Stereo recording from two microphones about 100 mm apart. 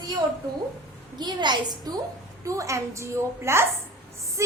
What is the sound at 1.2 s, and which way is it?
Speech, 45° right (ahead or behind).